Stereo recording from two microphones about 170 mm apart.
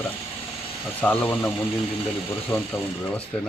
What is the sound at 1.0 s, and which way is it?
Speech, 10° left (ahead or behind).